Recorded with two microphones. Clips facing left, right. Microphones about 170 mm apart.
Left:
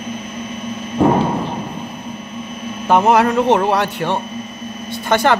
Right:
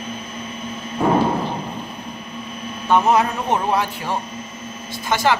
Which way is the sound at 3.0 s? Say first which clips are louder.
Left 5 dB; 75° left (ahead or behind).